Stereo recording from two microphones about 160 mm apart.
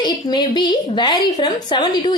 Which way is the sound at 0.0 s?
30° left (ahead or behind).